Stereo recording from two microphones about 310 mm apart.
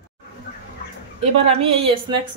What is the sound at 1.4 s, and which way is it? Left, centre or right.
Speech, centre.